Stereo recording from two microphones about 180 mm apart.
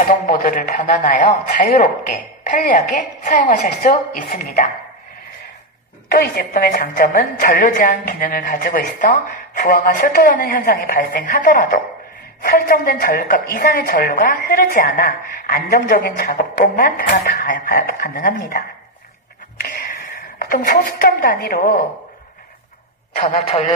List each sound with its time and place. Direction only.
0.1 s a woman's voice: 50° left (ahead or behind)
6.0 s a woman's voice: 55° left (ahead or behind)
19.6 s a woman's voice: 55° left (ahead or behind)
23.1 s a man's voice: 40° left (ahead or behind)